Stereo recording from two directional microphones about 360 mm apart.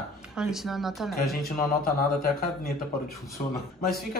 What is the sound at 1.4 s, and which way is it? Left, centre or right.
Speech, left.